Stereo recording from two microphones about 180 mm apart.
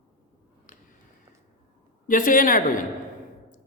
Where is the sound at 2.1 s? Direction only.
50° left (ahead or behind).